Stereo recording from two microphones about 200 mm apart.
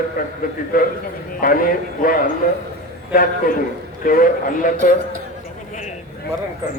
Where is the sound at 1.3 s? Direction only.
45° left (ahead or behind).